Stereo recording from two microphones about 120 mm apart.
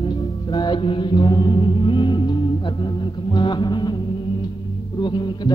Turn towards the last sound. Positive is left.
turn(degrees=40)  # may be behind; listen again after turning